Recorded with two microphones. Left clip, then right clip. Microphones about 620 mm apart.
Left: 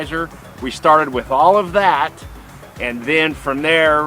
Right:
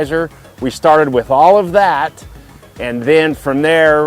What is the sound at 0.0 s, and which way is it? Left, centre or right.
Speech, right.